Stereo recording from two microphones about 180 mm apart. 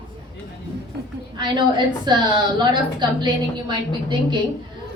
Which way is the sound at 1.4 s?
25° right (ahead or behind).